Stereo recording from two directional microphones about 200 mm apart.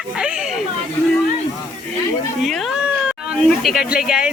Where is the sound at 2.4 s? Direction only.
Centre (ahead or behind).